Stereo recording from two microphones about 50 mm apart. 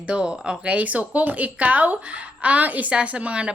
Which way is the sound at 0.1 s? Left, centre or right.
Centre.